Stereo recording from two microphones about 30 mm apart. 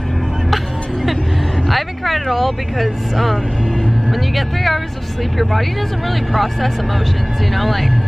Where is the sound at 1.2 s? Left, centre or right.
Centre.